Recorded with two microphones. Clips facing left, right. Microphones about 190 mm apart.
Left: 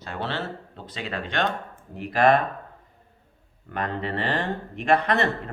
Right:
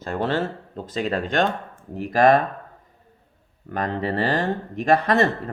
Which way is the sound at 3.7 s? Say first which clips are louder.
Right 4 dB; 40° right (ahead or behind).